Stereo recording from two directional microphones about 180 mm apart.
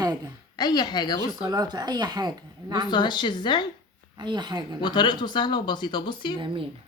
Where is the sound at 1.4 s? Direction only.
20° right (ahead or behind).